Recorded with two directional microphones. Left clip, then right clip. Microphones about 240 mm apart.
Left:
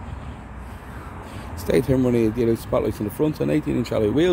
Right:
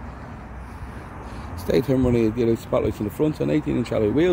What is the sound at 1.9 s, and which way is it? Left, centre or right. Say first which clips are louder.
Speech: left 1 dB; centre.